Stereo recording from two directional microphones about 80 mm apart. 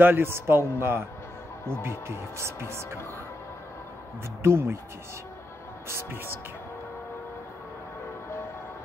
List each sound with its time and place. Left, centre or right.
0.0 s speech: right
4.4 s speech: right
5.9 s speech: right